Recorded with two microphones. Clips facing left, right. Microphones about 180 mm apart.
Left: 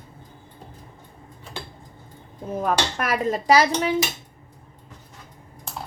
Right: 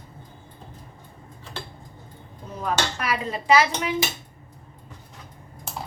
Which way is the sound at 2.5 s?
50° left (ahead or behind).